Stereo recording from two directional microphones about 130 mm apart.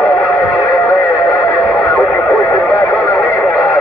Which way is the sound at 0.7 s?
20° left (ahead or behind).